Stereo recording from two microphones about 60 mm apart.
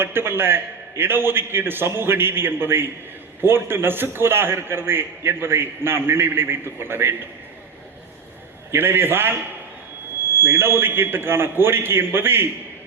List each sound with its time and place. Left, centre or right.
0.0 s a man's voice: right
8.7 s a man's voice: right
10.4 s a man's voice: right